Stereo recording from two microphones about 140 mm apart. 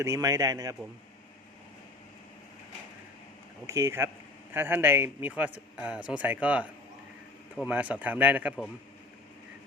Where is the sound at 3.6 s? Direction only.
20° right (ahead or behind).